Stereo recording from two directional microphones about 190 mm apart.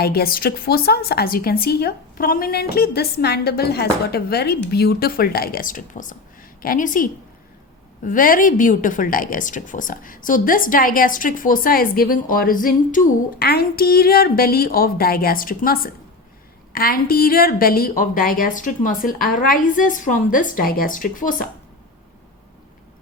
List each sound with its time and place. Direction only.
0.0 s a woman's voice: 55° left (ahead or behind)